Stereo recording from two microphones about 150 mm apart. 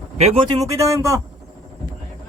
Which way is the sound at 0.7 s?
20° right (ahead or behind).